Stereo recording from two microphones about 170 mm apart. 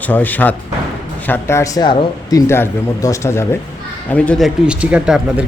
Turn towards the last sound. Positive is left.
turn(degrees=-5)  # may be behind; listen again after turning